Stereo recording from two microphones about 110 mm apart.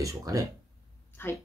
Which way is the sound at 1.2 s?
20° left (ahead or behind).